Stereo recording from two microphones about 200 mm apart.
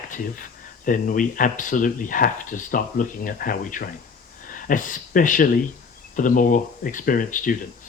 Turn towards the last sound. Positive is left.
turn(degrees=45)  # may be behind; listen again after turning